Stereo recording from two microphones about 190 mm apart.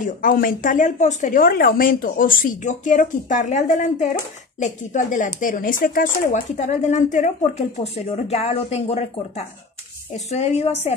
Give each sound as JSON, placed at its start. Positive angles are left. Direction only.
{"t": 0.0, "sound": "a woman's voice", "side_deg": 45}
{"t": 10.3, "sound": "a woman's voice", "side_deg": 35}